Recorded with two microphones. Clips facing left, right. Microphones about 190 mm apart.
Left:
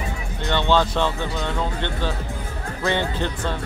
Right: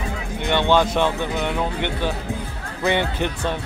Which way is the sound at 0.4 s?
15° right (ahead or behind).